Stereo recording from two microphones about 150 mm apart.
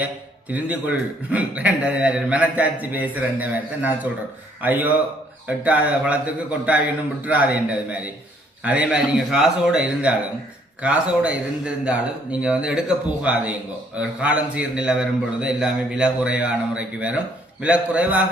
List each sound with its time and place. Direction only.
0.0 s speech: 10° right (ahead or behind)
7.3 s speech: 10° right (ahead or behind)